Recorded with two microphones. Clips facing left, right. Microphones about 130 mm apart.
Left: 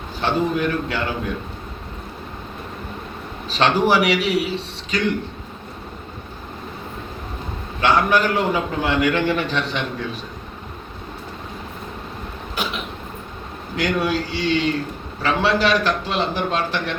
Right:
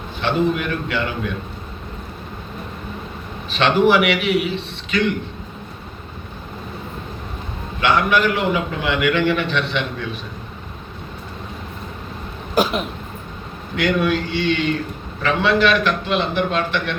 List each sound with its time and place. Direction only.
0.2 s a man's voice: 35° left (ahead or behind)
3.5 s a man's voice: 35° left (ahead or behind)
7.8 s a man's voice: 40° left (ahead or behind)
12.6 s throat clearing: 40° right (ahead or behind)
13.7 s a man's voice: 35° left (ahead or behind)